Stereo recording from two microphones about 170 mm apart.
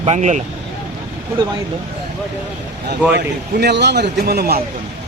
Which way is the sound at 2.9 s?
75° right (ahead or behind).